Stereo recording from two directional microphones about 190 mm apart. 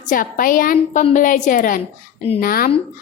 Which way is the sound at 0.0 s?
45° left (ahead or behind).